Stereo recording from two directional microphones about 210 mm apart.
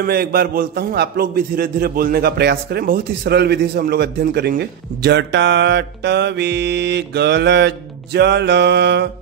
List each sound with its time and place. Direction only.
0.0 s a man's voice: 45° right (ahead or behind)